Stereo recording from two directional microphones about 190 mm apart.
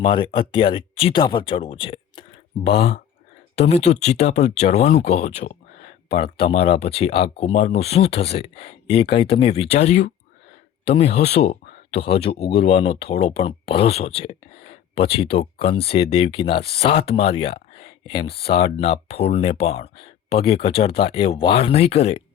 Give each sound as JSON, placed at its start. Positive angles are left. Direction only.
{"t": 0.0, "sound": "speech", "side_deg": 25}